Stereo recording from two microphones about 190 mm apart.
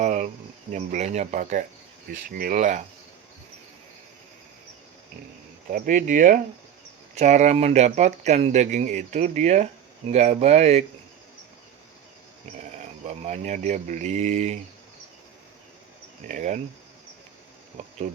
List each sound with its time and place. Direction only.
0.0 s cricket: 40° right (ahead or behind)
0.7 s speech: 40° right (ahead or behind)
5.6 s speech: 45° right (ahead or behind)
12.8 s speech: 35° right (ahead or behind)
16.3 s speech: 40° right (ahead or behind)